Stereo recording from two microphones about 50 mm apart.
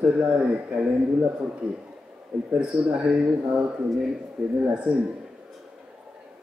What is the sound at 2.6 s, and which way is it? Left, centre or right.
Speech, right.